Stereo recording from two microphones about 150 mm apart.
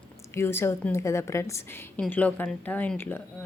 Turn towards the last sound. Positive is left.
turn(degrees=10)  # may be behind; listen again after turning